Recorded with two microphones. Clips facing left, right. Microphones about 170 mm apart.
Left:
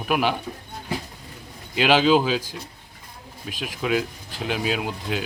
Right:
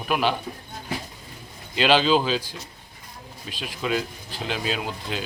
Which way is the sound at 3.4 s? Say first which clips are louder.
Left 2 dB; 5° left (ahead or behind).